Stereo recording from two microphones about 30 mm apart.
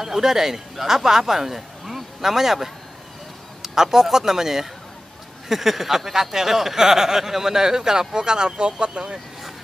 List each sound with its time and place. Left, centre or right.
0.0 s speech: centre